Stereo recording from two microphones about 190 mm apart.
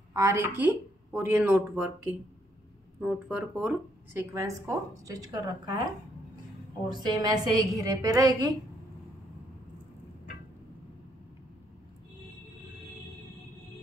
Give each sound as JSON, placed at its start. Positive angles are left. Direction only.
{"t": 0.1, "sound": "speech", "side_deg": -15}
{"t": 6.9, "sound": "a woman's voice", "side_deg": -25}